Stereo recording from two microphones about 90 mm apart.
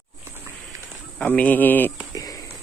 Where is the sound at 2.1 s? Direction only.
40° left (ahead or behind).